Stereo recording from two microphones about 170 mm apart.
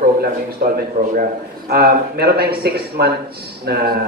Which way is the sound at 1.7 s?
65° right (ahead or behind).